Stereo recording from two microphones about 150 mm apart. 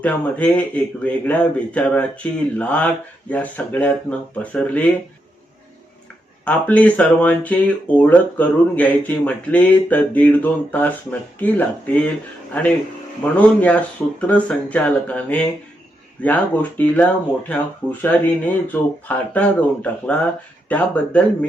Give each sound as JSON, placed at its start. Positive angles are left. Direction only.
{"t": 0.0, "sound": "speech", "side_deg": 10}
{"t": 6.4, "sound": "speech", "side_deg": 10}
{"t": 13.2, "sound": "speech", "side_deg": 10}